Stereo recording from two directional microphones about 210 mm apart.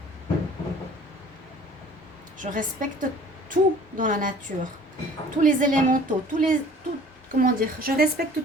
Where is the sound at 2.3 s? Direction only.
40° right (ahead or behind).